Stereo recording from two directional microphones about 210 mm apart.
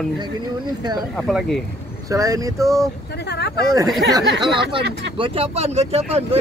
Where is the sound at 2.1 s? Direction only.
15° right (ahead or behind).